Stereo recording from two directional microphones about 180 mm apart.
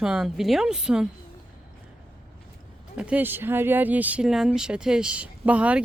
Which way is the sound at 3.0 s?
10° right (ahead or behind).